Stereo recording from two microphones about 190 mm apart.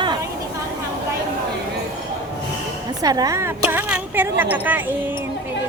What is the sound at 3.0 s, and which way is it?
A woman's voice, 20° right (ahead or behind).